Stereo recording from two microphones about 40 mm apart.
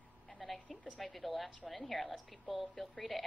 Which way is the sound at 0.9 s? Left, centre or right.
Centre.